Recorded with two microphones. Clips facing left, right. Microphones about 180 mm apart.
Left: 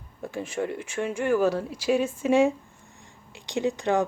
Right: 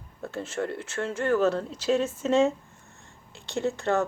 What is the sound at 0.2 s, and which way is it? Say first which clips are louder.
Speech: left 1 dB; 15° left (ahead or behind).